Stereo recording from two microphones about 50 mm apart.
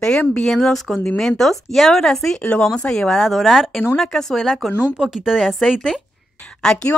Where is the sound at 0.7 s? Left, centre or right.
Centre.